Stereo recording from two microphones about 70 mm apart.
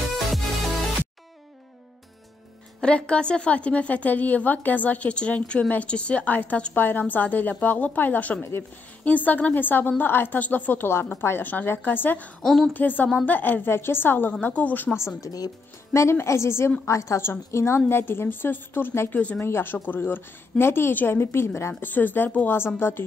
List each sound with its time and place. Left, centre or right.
2.8 s a woman's voice: centre
12.4 s a woman's voice: centre
12.7 s a woman's voice: left
15.1 s a woman's voice: left
21.7 s a woman's voice: left